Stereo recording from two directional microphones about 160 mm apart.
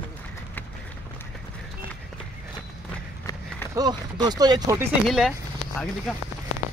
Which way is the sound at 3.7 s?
25° right (ahead or behind).